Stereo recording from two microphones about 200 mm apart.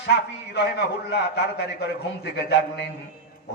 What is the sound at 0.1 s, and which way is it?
Speech, 60° left (ahead or behind).